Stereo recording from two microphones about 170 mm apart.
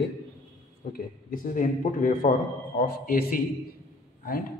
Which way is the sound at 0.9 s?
55° left (ahead or behind).